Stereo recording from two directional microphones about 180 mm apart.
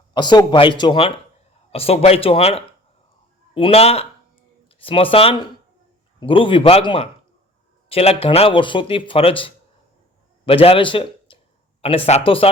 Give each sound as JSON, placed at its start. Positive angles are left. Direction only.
{"t": 0.1, "sound": "speech", "side_deg": 25}